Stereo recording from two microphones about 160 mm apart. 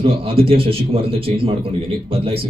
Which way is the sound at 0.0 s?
35° right (ahead or behind).